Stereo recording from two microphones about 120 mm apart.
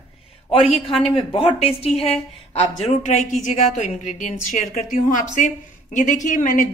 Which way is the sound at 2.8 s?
75° left (ahead or behind).